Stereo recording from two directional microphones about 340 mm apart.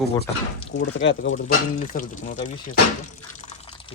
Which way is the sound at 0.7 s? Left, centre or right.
Left.